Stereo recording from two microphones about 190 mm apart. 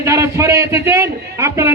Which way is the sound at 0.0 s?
15° right (ahead or behind).